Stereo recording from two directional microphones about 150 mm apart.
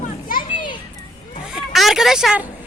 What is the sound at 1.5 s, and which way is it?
Speech, centre (ahead or behind).